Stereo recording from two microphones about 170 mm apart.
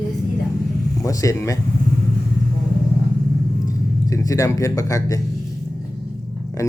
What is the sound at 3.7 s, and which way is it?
Speech, 20° left (ahead or behind).